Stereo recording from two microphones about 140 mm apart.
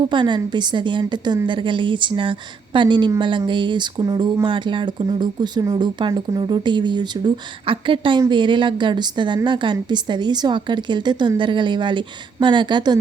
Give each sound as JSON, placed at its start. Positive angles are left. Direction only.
{"t": 0.1, "sound": "a woman's voice", "side_deg": -35}
{"t": 4.4, "sound": "a woman's voice", "side_deg": -35}